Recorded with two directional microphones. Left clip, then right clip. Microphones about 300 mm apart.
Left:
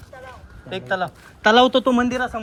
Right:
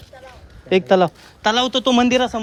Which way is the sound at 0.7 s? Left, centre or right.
Right.